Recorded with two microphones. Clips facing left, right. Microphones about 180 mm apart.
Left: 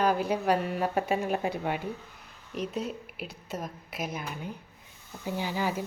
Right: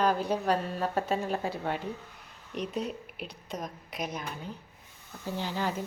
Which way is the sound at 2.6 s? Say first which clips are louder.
Left 1 dB; centre (ahead or behind).